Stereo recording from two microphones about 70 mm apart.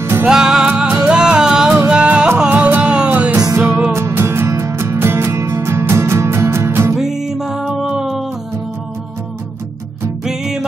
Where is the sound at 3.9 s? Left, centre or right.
Right.